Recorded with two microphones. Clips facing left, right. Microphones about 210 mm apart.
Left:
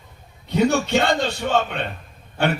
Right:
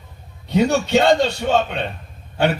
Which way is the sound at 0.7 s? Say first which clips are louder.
Right 4 dB; 55° left (ahead or behind).